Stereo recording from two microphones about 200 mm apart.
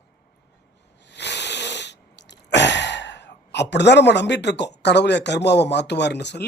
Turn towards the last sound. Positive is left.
turn(degrees=55)  # may be behind; listen again after turning